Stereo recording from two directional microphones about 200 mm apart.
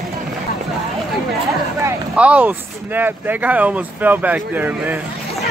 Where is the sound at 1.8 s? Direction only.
5° right (ahead or behind).